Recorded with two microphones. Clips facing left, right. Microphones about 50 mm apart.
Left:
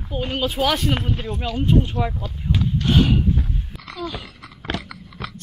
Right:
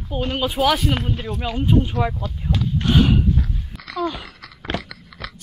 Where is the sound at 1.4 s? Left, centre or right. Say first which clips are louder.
Even; centre.